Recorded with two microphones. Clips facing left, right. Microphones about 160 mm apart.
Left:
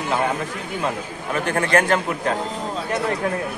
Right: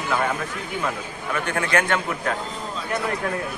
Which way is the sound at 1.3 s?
35° left (ahead or behind).